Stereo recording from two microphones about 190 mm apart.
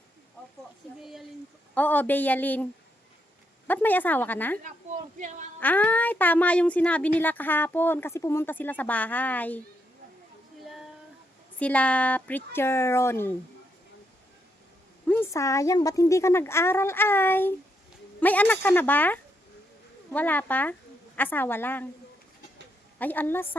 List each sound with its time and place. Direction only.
1.7 s speech: 10° left (ahead or behind)
3.7 s speech: 10° left (ahead or behind)
4.6 s speech: 40° right (ahead or behind)
5.5 s speech: 10° left (ahead or behind)
11.6 s speech: 5° left (ahead or behind)
15.0 s speech: 10° left (ahead or behind)
23.0 s speech: 10° left (ahead or behind)